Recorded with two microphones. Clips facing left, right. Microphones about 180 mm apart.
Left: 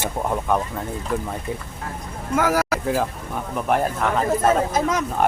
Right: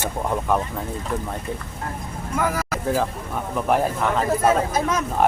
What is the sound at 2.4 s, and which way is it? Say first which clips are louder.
Speech: left 4 dB; 75° left (ahead or behind).